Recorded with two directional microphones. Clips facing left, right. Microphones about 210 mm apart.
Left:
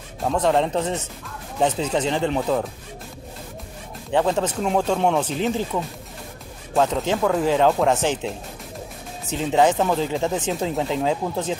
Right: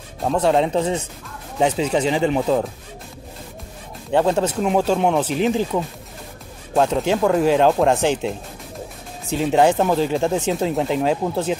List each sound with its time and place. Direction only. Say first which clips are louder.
0.3 s speech: right 2 dB; 10° right (ahead or behind)
4.1 s speech: right 3 dB; 10° right (ahead or behind)
5.3 s speech: right 4 dB; 15° right (ahead or behind)
6.8 s speech: right 3 dB; 10° right (ahead or behind)
9.3 s speech: right 2 dB; 15° right (ahead or behind)